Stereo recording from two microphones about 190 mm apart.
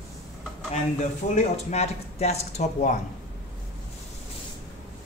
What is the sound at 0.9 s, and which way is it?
Speech, 35° left (ahead or behind).